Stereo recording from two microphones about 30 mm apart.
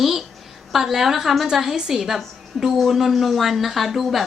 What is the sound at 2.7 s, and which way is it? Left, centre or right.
Speech, centre.